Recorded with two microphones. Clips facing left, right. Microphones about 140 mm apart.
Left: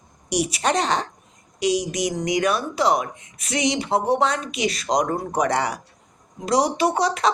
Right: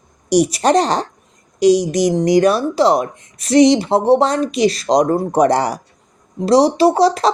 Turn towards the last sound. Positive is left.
turn(degrees=-35)  # may be behind; listen again after turning